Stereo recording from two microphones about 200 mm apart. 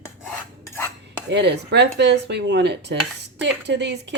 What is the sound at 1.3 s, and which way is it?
A woman's voice, 60° right (ahead or behind).